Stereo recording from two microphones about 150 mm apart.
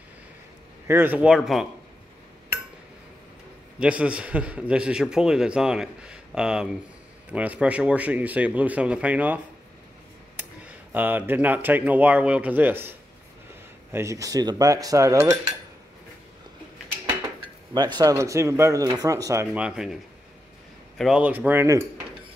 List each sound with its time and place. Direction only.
0.8 s speech: 15° right (ahead or behind)
3.8 s a man's voice: 5° right (ahead or behind)
13.9 s speech: 20° right (ahead or behind)
17.7 s speech: 30° right (ahead or behind)
19.5 s a man's voice: 5° right (ahead or behind)
21.0 s speech: 10° right (ahead or behind)